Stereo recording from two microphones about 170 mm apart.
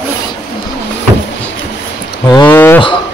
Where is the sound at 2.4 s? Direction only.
10° left (ahead or behind).